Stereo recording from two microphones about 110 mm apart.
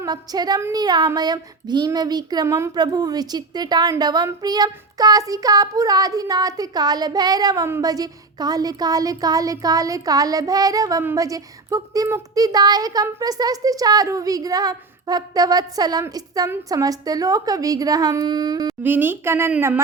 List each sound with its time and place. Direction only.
0.0 s child singing: 35° right (ahead or behind)
2.7 s child singing: 40° right (ahead or behind)
18.8 s a woman's voice: 20° right (ahead or behind)